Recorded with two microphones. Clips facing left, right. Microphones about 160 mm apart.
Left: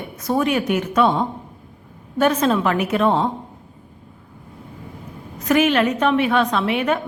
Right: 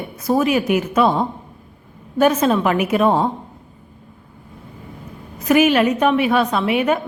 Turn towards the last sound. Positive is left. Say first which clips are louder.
# right 2 dB
turn(degrees=-10)  # may be behind; listen again after turning